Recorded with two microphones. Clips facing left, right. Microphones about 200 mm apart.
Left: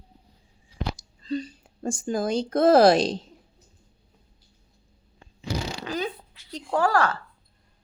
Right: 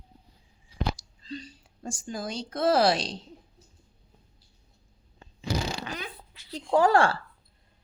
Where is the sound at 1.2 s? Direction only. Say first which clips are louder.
Left 11 dB; 50° left (ahead or behind).